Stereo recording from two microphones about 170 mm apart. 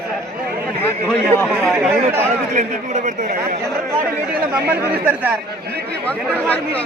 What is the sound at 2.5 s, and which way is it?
A man's voice, 45° right (ahead or behind).